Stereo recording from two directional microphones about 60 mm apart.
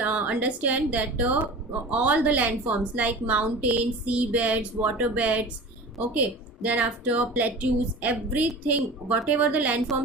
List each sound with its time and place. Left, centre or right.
0.0 s a woman's voice: right